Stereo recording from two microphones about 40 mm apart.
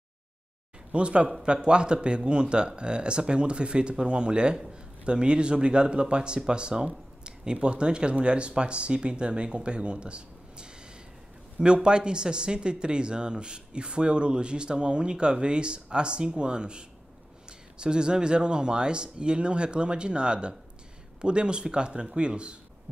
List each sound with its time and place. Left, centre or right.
0.9 s speech: right